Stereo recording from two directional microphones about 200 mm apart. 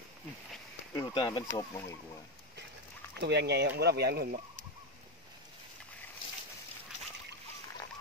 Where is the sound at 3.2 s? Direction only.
55° right (ahead or behind).